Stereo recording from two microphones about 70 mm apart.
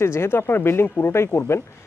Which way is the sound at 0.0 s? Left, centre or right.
Left.